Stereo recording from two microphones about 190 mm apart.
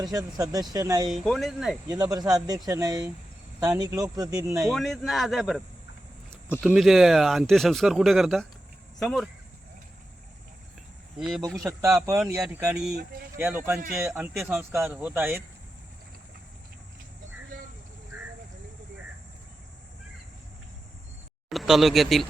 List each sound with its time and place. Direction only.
0.0 s speech: 20° right (ahead or behind)
1.1 s speech: centre (ahead or behind)
1.9 s speech: 20° right (ahead or behind)
4.6 s speech: centre (ahead or behind)
11.2 s speech: centre (ahead or behind)
11.5 s speech: 15° right (ahead or behind)
13.3 s speech: 10° right (ahead or behind)
21.5 s speech: centre (ahead or behind)